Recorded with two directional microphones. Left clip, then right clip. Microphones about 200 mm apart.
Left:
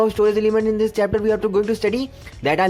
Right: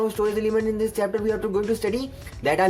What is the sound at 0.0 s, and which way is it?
Speech, 35° left (ahead or behind).